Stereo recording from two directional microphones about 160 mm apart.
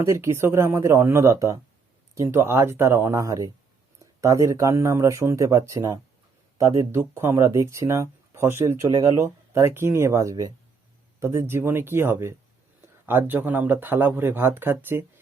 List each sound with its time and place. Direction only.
0.0 s speech: 15° right (ahead or behind)